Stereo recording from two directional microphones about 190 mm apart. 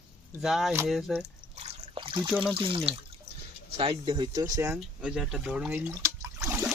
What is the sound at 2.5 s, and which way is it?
Speech, 30° right (ahead or behind).